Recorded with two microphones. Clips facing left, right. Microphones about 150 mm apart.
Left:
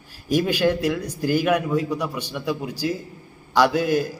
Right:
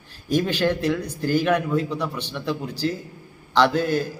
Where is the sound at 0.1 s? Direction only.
10° left (ahead or behind).